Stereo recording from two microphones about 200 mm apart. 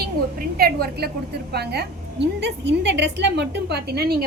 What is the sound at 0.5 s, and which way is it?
A woman's voice, 50° right (ahead or behind).